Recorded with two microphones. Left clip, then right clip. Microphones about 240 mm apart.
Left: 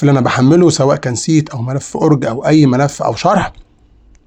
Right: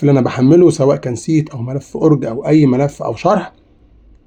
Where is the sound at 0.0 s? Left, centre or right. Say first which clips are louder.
Left 1 dB; left.